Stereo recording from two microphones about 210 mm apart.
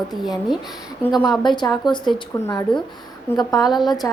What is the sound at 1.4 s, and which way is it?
A woman's voice, 20° left (ahead or behind).